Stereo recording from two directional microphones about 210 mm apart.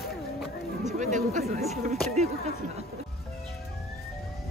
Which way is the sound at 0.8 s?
35° right (ahead or behind).